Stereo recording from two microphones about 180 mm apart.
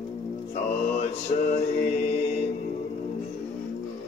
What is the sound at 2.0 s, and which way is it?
Mantra, 40° left (ahead or behind).